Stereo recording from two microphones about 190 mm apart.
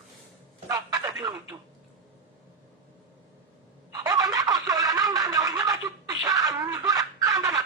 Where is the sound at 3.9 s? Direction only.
20° right (ahead or behind).